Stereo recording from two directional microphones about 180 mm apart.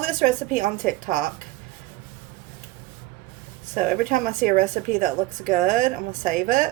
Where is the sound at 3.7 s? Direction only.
45° right (ahead or behind).